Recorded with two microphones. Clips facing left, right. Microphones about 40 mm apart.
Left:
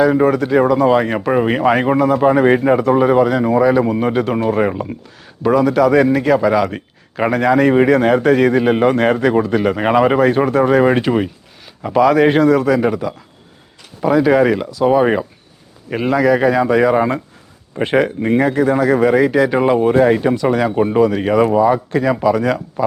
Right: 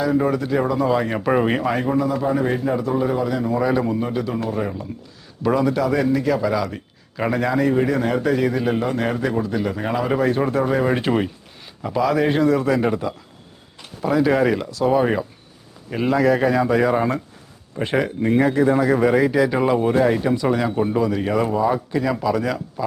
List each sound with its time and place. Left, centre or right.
0.0 s a man's voice: left
1.2 s speech: centre
1.6 s speech: left
3.6 s speech: centre
3.8 s a man's voice: left
7.6 s a man's voice: left
11.8 s speech: centre
12.2 s a man's voice: left
12.8 s speech: centre
14.1 s speech: centre
20.7 s a man's voice: left